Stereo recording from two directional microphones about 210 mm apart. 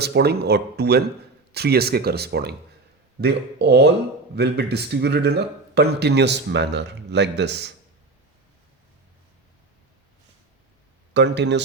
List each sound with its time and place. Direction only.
0.0 s a man's voice: 50° right (ahead or behind)
11.1 s speech: 55° right (ahead or behind)